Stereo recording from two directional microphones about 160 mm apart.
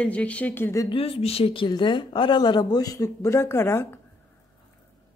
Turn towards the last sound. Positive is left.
turn(degrees=15)  # may be behind; listen again after turning